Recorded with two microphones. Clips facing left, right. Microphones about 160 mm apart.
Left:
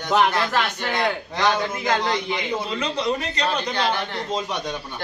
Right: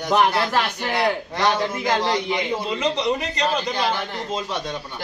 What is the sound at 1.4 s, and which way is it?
Speech, 20° right (ahead or behind).